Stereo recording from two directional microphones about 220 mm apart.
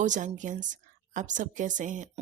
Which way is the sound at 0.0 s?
35° right (ahead or behind).